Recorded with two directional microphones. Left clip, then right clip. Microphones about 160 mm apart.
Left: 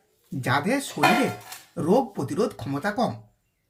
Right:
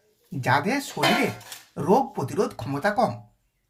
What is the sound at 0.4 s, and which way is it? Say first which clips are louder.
Speech: right 1 dB; 15° right (ahead or behind).